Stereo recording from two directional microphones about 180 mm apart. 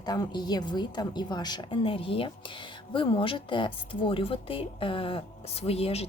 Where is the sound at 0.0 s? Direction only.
25° left (ahead or behind).